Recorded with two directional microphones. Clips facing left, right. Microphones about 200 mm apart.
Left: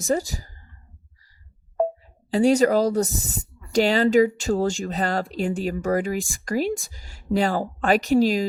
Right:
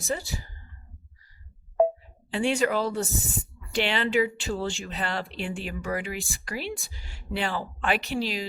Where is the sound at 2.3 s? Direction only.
40° left (ahead or behind).